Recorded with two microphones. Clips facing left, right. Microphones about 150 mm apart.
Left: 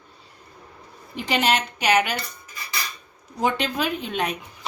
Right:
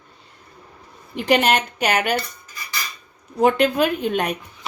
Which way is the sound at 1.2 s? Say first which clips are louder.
Right 5 dB; 55° right (ahead or behind).